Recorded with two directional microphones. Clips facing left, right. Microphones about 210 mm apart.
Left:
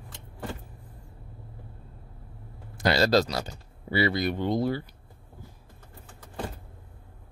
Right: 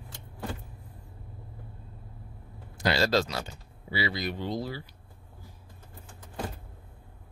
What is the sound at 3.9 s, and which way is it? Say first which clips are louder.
Speech: left 6 dB; 55° left (ahead or behind).